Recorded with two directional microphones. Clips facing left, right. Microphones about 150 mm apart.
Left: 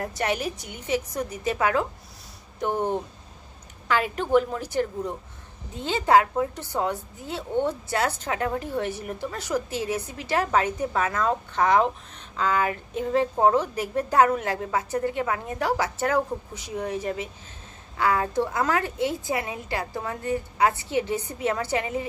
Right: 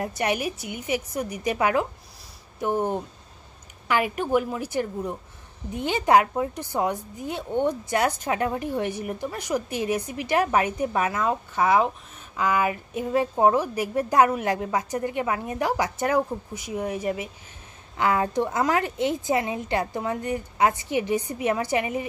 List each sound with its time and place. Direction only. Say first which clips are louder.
0.0 s a woman's voice: right 1 dB; 15° right (ahead or behind)